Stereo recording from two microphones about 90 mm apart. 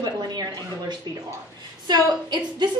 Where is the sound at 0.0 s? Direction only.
50° right (ahead or behind).